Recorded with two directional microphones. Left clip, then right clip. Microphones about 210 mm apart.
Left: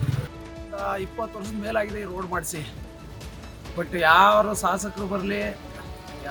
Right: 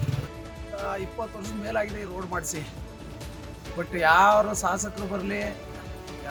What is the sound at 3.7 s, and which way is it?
Speech, 5° right (ahead or behind).